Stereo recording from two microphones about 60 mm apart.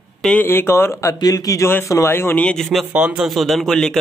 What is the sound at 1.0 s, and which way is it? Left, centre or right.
Speech, left.